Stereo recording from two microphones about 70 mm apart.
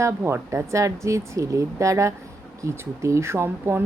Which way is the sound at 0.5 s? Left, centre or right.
Right.